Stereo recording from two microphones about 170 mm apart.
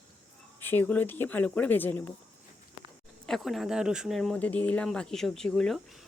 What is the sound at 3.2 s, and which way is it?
Speech, centre (ahead or behind).